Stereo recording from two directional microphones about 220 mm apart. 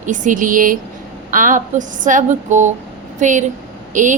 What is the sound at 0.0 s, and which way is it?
A woman's voice, 35° right (ahead or behind).